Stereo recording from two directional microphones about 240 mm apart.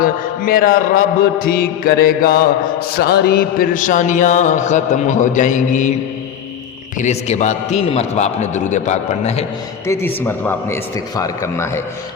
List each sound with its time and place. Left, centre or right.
0.0 s music: left
7.0 s a man's voice: left
9.8 s a man's voice: centre